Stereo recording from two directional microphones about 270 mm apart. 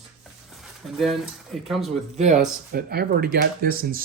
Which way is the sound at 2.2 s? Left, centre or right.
Right.